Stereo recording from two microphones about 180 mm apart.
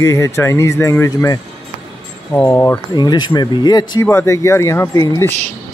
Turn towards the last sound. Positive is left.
turn(degrees=20)  # may be behind; listen again after turning